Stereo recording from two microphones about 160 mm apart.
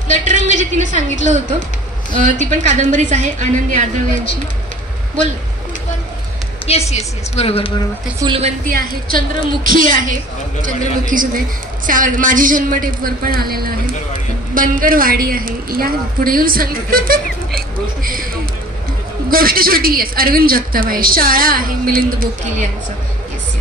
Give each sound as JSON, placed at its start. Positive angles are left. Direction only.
{"t": 0.1, "sound": "a woman's voice", "side_deg": -50}
{"t": 2.1, "sound": "a woman's voice", "side_deg": -50}
{"t": 6.9, "sound": "a woman's voice", "side_deg": 40}
{"t": 8.2, "sound": "a woman's voice", "side_deg": -25}
{"t": 8.6, "sound": "a woman's voice", "side_deg": -60}
{"t": 17.6, "sound": "a sound", "side_deg": -65}
{"t": 19.3, "sound": "a woman's voice", "side_deg": -65}